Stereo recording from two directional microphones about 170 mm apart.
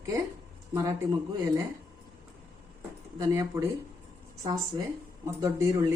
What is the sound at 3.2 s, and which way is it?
Speech, 20° right (ahead or behind).